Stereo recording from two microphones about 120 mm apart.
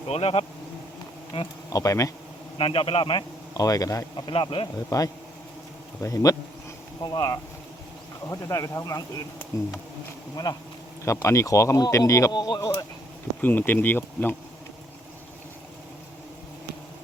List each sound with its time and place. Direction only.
0.1 s a man's voice: 60° left (ahead or behind)
1.7 s speech: 30° left (ahead or behind)
2.6 s a man's voice: 50° left (ahead or behind)
3.5 s speech: 30° left (ahead or behind)
4.3 s a man's voice: 45° left (ahead or behind)
4.9 s speech: 30° left (ahead or behind)
12.3 s speech: 35° left (ahead or behind)
13.4 s speech: 15° left (ahead or behind)